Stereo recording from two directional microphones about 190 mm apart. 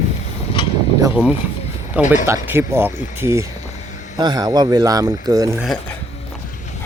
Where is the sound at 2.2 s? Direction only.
15° right (ahead or behind).